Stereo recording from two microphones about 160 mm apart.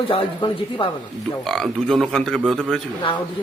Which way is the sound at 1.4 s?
Centre (ahead or behind).